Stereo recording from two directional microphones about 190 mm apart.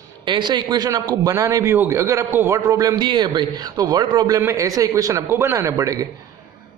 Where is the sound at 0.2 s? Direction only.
25° right (ahead or behind).